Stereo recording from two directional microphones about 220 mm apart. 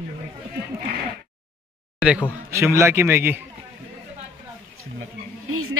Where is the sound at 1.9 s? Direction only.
5° right (ahead or behind).